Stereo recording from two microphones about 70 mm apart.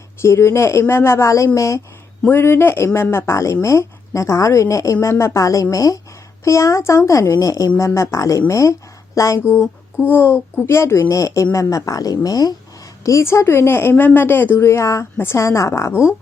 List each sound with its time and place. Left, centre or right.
0.2 s a woman's voice: left
2.3 s a woman's voice: left
10.1 s speech: left
11.1 s a woman's voice: left
13.0 s a woman's voice: left
14.6 s a woman's voice: left